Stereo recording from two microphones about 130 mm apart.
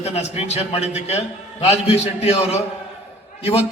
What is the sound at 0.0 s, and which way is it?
A man's voice, 55° left (ahead or behind).